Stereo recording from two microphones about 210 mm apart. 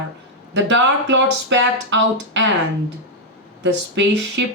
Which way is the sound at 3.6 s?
55° right (ahead or behind).